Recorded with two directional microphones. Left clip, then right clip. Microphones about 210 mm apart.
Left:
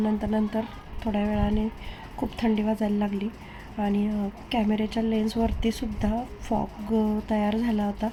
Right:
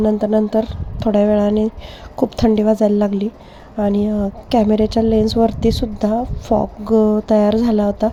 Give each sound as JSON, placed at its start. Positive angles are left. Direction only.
{"t": 0.0, "sound": "a woman's voice", "side_deg": -30}